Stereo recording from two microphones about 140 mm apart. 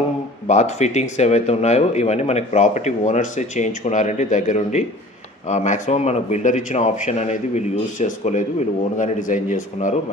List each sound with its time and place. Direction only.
0.5 s speech: 55° left (ahead or behind)